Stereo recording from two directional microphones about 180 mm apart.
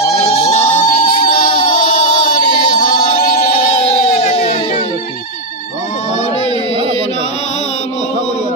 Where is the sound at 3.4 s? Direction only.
35° left (ahead or behind).